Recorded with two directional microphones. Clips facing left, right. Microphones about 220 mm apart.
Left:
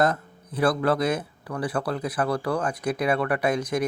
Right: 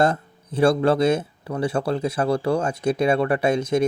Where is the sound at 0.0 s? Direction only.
30° right (ahead or behind).